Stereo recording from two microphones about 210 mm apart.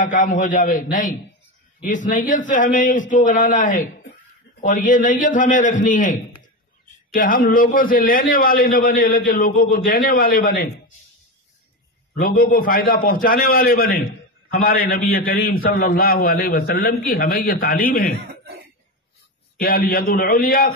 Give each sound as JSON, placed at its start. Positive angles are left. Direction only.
{"t": 0.0, "sound": "a man's voice", "side_deg": 40}
{"t": 12.2, "sound": "a man's voice", "side_deg": 45}
{"t": 18.2, "sound": "a sound", "side_deg": -55}
{"t": 19.6, "sound": "a man's voice", "side_deg": 45}